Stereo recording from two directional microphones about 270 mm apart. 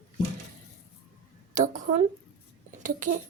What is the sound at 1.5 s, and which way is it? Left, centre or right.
A child's voice, right.